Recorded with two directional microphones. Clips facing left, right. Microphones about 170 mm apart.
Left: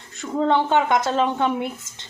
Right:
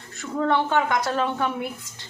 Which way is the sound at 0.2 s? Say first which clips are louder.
Left 3 dB; 20° left (ahead or behind).